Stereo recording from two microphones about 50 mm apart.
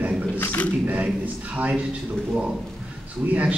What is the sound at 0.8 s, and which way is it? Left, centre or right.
Speech, right.